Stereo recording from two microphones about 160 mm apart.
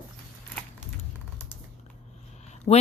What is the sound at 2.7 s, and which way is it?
Speech, 35° left (ahead or behind).